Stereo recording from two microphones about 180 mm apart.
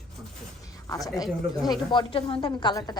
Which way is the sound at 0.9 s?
20° left (ahead or behind).